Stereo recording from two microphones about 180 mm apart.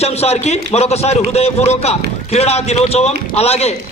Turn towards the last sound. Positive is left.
turn(degrees=35)  # may be behind; listen again after turning